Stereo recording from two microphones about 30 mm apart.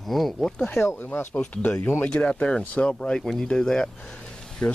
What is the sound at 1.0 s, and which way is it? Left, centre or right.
Speech, left.